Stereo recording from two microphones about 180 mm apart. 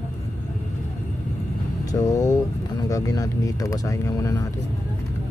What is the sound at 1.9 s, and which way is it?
Speech, 20° left (ahead or behind).